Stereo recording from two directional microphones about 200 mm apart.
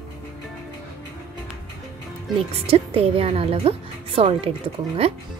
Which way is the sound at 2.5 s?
30° right (ahead or behind).